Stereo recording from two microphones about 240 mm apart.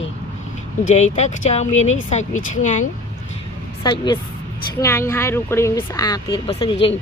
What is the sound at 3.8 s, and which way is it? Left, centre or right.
Speech, centre.